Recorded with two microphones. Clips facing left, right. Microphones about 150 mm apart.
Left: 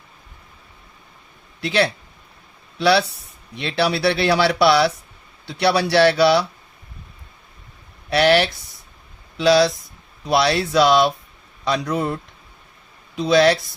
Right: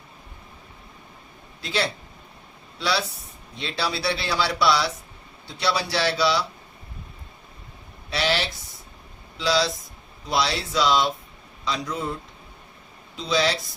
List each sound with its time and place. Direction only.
1.6 s speech: 65° left (ahead or behind)
8.1 s speech: 60° left (ahead or behind)